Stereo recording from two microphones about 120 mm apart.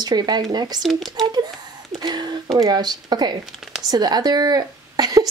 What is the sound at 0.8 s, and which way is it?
Speech, centre (ahead or behind).